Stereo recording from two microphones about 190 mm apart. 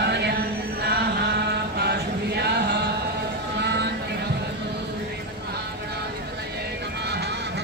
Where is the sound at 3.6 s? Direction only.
60° right (ahead or behind).